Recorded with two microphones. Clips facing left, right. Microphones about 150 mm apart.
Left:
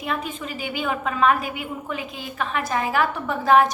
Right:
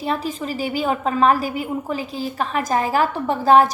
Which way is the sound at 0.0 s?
35° right (ahead or behind).